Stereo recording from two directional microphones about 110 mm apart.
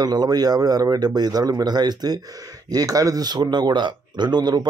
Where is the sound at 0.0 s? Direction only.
40° right (ahead or behind).